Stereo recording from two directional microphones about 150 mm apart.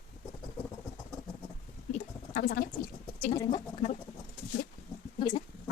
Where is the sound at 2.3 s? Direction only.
70° left (ahead or behind).